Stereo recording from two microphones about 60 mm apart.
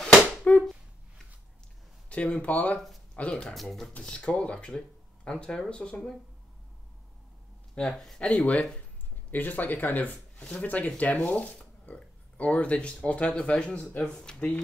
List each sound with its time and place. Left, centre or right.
0.4 s a sound: left
2.0 s speech: centre
3.5 s speech: centre
4.0 s speech: centre
7.7 s speech: centre
8.2 s speech: centre